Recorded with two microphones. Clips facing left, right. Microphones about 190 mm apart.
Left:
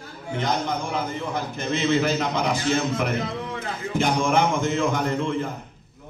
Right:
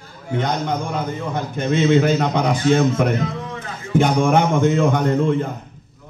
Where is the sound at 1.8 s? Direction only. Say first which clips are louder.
Right 5 dB; 55° right (ahead or behind).